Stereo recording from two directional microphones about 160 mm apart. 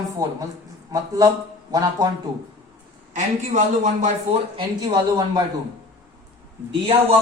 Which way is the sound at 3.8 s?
50° right (ahead or behind).